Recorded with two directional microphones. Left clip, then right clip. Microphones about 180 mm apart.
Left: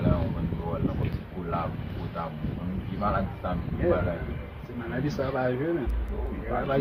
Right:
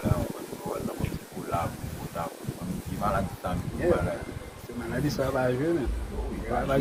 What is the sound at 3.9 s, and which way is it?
Speech, 30° right (ahead or behind).